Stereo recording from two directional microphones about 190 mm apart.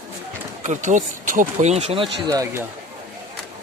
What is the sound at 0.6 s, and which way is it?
Speech, 40° right (ahead or behind).